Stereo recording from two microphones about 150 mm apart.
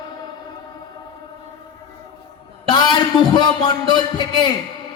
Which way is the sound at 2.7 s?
30° left (ahead or behind).